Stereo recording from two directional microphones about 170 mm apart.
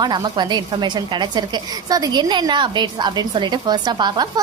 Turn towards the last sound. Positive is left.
turn(degrees=-25)  # may be behind; listen again after turning